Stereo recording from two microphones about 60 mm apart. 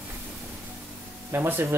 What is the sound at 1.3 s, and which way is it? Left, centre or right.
Speech, right.